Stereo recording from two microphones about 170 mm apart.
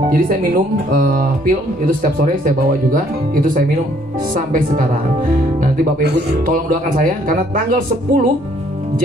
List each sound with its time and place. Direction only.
0.1 s speech: 55° right (ahead or behind)